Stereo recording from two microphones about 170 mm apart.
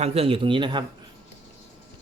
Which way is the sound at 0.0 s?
35° right (ahead or behind).